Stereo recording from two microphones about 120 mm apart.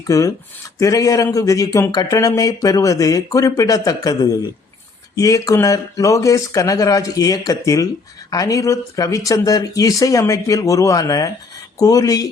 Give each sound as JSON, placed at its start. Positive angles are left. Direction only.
{"t": 0.1, "sound": "speech", "side_deg": 30}